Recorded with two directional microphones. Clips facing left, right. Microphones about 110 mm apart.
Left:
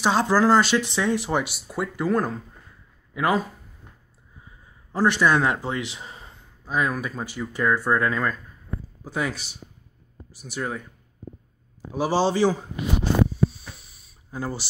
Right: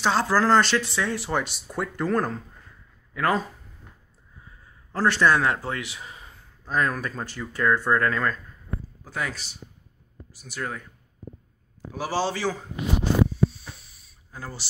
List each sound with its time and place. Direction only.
0.0 s speech: 15° left (ahead or behind)
0.7 s speech: 20° left (ahead or behind)
4.5 s a man's voice: 15° left (ahead or behind)
6.6 s speech: 10° left (ahead or behind)
11.9 s a man's voice: 20° left (ahead or behind)
14.3 s speech: 15° left (ahead or behind)